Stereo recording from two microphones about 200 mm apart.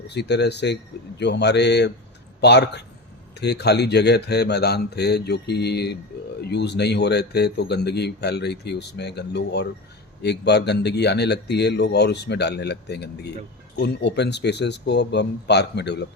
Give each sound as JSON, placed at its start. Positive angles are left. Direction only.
{"t": 0.1, "sound": "speech", "side_deg": 60}